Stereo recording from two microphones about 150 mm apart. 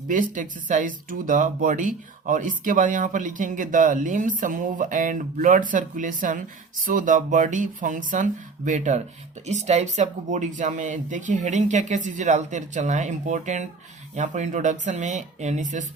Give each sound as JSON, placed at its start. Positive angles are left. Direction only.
{"t": 0.1, "sound": "speech", "side_deg": -60}